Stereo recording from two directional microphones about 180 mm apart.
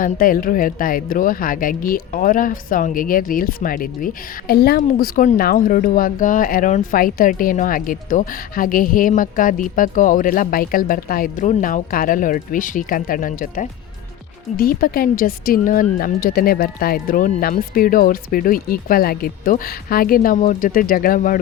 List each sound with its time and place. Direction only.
0.0 s speech: 50° left (ahead or behind)